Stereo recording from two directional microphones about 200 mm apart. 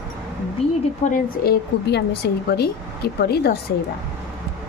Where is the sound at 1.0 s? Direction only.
45° left (ahead or behind).